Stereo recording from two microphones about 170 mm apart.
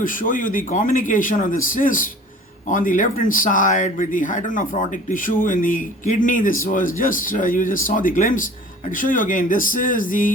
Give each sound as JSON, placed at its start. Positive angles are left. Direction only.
{"t": 0.0, "sound": "speech", "side_deg": 50}